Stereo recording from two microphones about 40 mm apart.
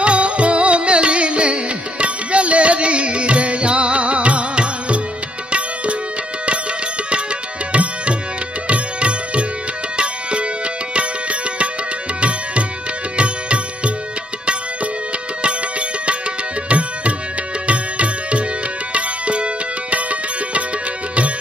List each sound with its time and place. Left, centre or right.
0.0 s music: right
7.7 s tabla: right
8.6 s music: right
10.9 s music: right
16.6 s tabla: right
17.6 s music: right